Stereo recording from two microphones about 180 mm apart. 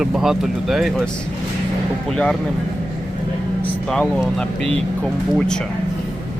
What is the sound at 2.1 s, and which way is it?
Speech, 5° left (ahead or behind).